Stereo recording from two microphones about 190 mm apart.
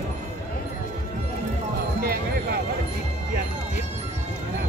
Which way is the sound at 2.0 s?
55° right (ahead or behind).